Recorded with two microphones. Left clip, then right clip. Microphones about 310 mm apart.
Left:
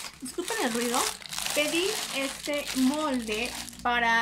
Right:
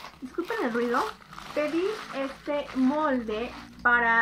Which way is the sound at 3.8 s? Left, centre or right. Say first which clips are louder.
Right 3 dB; centre.